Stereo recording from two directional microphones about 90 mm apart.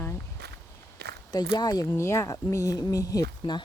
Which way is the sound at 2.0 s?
35° left (ahead or behind).